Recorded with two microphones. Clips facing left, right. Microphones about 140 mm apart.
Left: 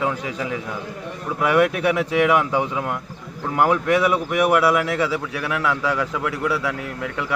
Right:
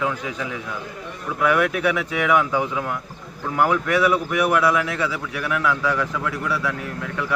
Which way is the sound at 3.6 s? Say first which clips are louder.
Left 1 dB; 25° left (ahead or behind).